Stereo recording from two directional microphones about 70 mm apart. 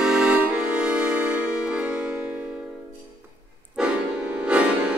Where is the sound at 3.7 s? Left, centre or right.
Centre.